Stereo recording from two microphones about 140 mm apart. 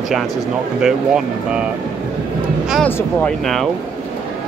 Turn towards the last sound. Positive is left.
turn(degrees=0)  # may be behind; listen again after turning